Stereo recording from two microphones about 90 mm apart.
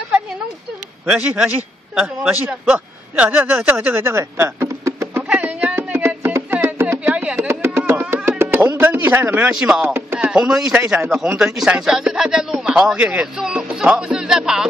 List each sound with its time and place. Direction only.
1.0 s speech: 10° right (ahead or behind); by 5.2 s 30° right (ahead or behind)
5.3 s a sound: 15° right (ahead or behind)
5.8 s music: 15° right (ahead or behind)
9.5 s speech: 10° right (ahead or behind)